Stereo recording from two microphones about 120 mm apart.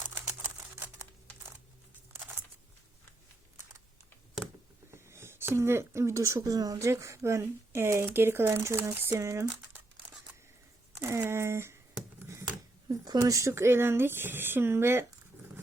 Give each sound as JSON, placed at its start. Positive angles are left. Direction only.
{"t": 4.9, "sound": "speech", "side_deg": -20}
{"t": 11.0, "sound": "speech", "side_deg": -20}
{"t": 12.9, "sound": "speech", "side_deg": -30}